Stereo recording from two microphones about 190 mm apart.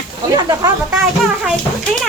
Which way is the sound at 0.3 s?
20° right (ahead or behind).